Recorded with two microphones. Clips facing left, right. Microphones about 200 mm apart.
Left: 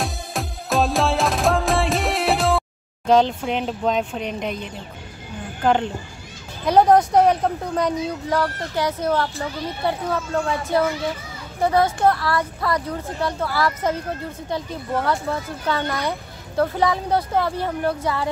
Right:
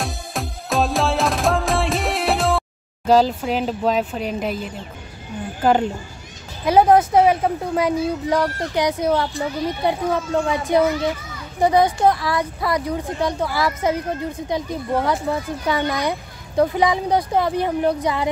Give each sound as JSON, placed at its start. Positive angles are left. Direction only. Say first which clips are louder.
{"t": 0.0, "sound": "music", "louder": "even", "side_deg": 0}
{"t": 3.1, "sound": "speech", "louder": "right 1 dB", "side_deg": -5}